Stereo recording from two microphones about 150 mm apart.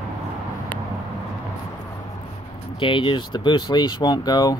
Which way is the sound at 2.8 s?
35° left (ahead or behind).